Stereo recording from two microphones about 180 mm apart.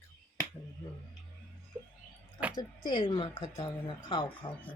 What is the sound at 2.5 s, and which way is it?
Speech, 25° left (ahead or behind).